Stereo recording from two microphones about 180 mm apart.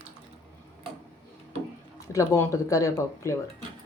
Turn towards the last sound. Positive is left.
turn(degrees=15)  # may be behind; listen again after turning